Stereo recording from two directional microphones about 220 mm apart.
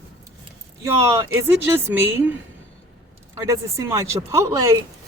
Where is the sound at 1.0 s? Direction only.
15° right (ahead or behind).